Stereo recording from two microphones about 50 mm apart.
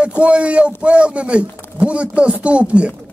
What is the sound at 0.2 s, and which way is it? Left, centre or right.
A man's voice, right.